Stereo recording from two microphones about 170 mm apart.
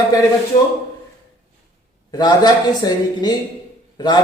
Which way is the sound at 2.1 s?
25° left (ahead or behind).